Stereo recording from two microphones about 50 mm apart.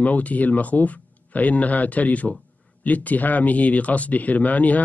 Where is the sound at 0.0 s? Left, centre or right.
Left.